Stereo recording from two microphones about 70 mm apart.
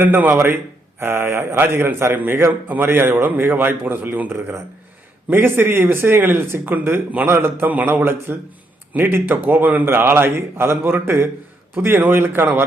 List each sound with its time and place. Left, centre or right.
0.0 s a man's voice: right